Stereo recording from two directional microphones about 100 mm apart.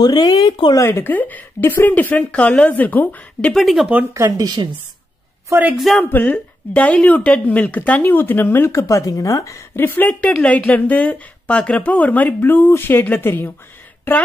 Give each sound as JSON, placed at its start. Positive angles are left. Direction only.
{"t": 0.0, "sound": "speech", "side_deg": 40}
{"t": 0.7, "sound": "speech", "side_deg": 25}
{"t": 3.5, "sound": "speech", "side_deg": 0}
{"t": 4.1, "sound": "speech", "side_deg": -35}
{"t": 5.8, "sound": "speech", "side_deg": 0}
{"t": 6.0, "sound": "speech", "side_deg": 20}